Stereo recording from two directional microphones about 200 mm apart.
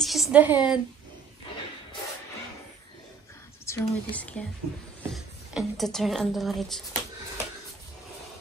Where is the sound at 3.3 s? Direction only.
15° left (ahead or behind).